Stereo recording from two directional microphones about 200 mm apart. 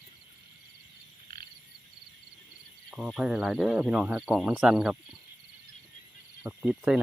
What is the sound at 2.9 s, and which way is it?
Speech, centre (ahead or behind).